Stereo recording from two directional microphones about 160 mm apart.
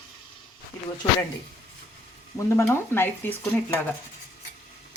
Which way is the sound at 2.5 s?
15° left (ahead or behind).